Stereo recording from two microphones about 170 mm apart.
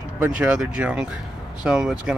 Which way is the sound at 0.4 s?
5° right (ahead or behind).